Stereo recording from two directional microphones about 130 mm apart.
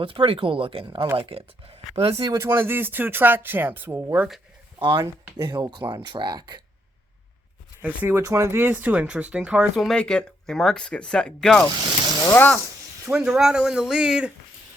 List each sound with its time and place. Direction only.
0.0 s speech: 45° right (ahead or behind)
2.2 s speech: 20° right (ahead or behind)
4.8 s speech: 35° right (ahead or behind)
7.8 s speech: 15° right (ahead or behind); by 12.5 s 15° left (ahead or behind)
13.1 s speech: 5° right (ahead or behind)